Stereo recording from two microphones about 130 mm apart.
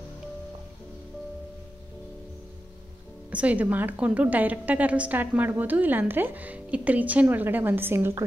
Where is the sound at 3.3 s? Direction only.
10° right (ahead or behind).